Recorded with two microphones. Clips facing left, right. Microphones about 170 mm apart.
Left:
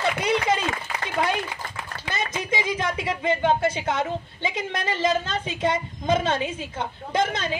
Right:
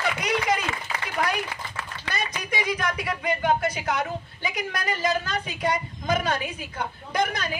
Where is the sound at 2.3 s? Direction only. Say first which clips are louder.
Left 3 dB; 25° left (ahead or behind).